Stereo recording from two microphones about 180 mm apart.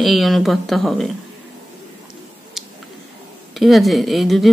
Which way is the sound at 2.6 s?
Centre (ahead or behind).